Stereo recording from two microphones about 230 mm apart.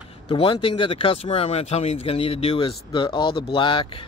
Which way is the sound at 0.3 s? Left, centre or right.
Left.